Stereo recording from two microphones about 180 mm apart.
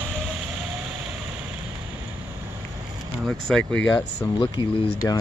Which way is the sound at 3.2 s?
5° left (ahead or behind).